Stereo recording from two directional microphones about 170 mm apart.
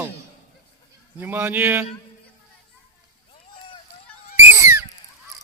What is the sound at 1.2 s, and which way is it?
Speech, 10° right (ahead or behind).